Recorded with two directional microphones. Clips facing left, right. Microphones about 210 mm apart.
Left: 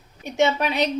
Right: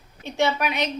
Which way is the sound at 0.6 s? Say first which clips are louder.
Left 3 dB; 35° left (ahead or behind).